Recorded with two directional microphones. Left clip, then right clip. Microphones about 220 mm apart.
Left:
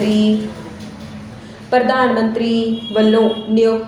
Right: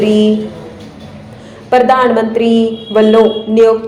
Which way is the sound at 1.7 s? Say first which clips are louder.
Right 5 dB; 15° right (ahead or behind).